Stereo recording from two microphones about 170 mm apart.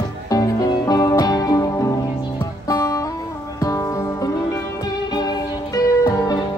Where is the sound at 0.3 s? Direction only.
20° left (ahead or behind).